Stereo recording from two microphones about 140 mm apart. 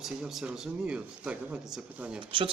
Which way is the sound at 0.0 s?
Centre (ahead or behind).